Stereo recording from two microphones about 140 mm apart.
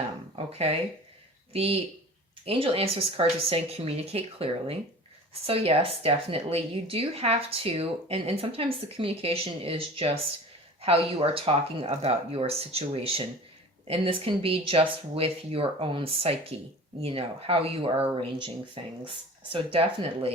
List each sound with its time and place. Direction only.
1.5 s speech: 45° right (ahead or behind)